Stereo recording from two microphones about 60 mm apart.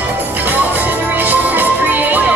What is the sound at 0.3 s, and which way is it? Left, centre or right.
Music, right.